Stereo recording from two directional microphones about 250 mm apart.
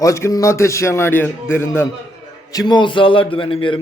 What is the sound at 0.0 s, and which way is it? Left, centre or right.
A man's voice, centre.